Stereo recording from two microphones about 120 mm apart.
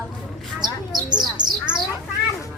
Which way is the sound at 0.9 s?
35° right (ahead or behind).